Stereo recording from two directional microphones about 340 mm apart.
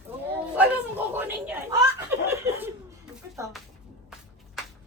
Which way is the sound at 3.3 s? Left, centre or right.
Centre.